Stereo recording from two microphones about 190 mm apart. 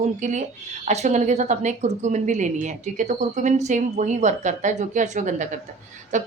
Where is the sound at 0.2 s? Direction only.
40° right (ahead or behind).